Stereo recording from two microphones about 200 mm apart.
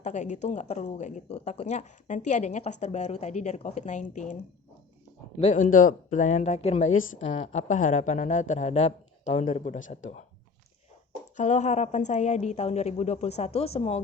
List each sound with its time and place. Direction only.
0.0 s speech: 35° left (ahead or behind)
5.4 s speech: 35° left (ahead or behind)
11.3 s speech: 35° left (ahead or behind)